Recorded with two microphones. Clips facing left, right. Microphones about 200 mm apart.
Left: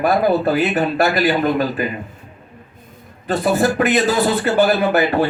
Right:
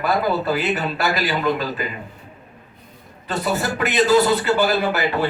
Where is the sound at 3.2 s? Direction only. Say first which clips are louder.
Left 6 dB; 50° left (ahead or behind).